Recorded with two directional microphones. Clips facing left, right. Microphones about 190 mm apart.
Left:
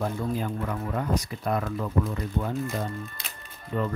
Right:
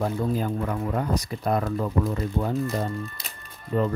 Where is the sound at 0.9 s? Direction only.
35° right (ahead or behind).